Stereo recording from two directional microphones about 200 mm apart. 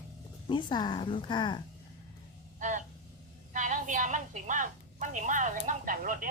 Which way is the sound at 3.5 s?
40° right (ahead or behind).